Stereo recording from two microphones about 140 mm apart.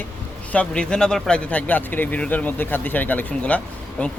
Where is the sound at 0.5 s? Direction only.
5° left (ahead or behind).